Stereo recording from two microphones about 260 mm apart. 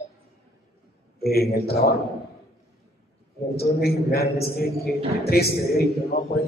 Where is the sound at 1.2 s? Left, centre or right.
Left.